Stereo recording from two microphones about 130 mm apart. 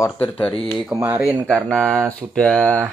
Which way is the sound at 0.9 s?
15° right (ahead or behind).